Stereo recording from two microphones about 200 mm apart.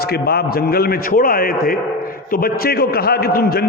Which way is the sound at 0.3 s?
50° left (ahead or behind).